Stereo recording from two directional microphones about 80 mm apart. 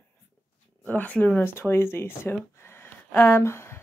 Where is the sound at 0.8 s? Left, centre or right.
Centre.